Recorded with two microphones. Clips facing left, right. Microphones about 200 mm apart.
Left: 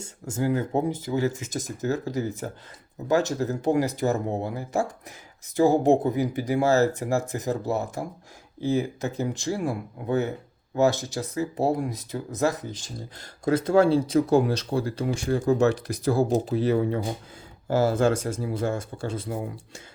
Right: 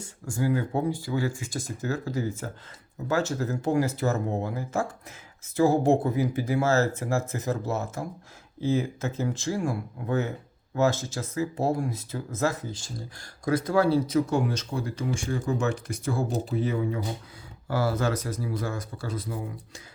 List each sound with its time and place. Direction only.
0.0 s speech: 20° left (ahead or behind); by 16.6 s 40° left (ahead or behind)
17.7 s speech: 25° left (ahead or behind)